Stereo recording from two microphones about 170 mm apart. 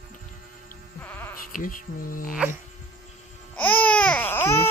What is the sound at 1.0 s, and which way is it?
Sheep, 10° left (ahead or behind).